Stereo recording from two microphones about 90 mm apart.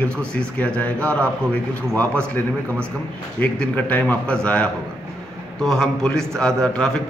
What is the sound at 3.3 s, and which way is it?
A man's voice, 15° left (ahead or behind).